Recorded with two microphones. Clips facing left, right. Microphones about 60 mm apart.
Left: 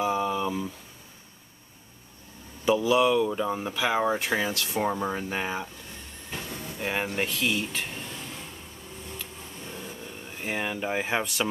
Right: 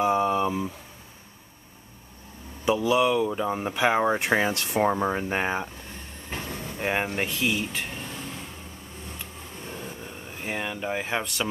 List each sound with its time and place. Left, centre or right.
0.0 s a sound: centre
0.3 s a sound: right
2.6 s speech: centre
3.6 s speech: right
4.8 s speech: right
6.3 s vehicle: right
7.2 s speech: centre
9.2 s a sound: right
10.4 s speech: centre